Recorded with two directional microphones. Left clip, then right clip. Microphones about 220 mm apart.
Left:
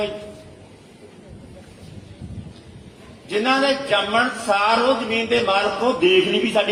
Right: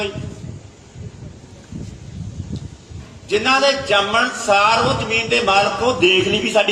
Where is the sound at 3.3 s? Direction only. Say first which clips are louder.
Right 4 dB; 50° right (ahead or behind).